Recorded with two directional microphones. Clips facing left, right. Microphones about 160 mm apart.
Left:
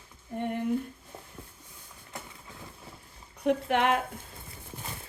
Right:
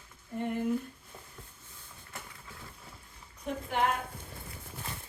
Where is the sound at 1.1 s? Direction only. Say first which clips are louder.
Left 4 dB; 25° left (ahead or behind).